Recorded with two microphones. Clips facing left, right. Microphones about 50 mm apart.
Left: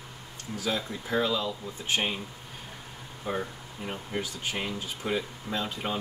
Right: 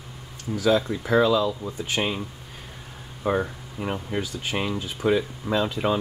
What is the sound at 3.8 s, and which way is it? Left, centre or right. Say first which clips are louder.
Speech: right 6 dB; right.